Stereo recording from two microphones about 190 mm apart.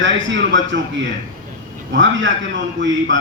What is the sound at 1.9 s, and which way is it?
A man's voice, 75° right (ahead or behind).